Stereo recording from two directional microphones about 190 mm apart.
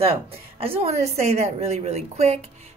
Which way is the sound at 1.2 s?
35° right (ahead or behind).